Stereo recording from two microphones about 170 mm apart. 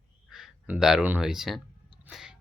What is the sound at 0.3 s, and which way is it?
Speech, centre (ahead or behind).